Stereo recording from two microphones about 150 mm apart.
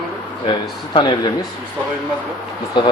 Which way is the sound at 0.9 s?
30° left (ahead or behind).